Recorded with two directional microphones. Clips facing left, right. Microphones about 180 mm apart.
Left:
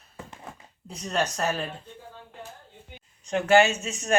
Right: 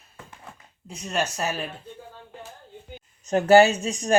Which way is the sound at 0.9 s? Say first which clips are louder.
Even; 5° right (ahead or behind).